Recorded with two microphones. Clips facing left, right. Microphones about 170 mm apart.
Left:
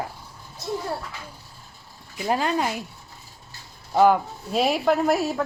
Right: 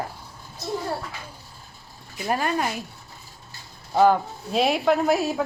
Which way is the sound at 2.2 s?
15° left (ahead or behind).